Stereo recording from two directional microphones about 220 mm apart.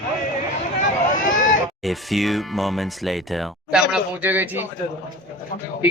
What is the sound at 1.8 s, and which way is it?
Speech, centre (ahead or behind).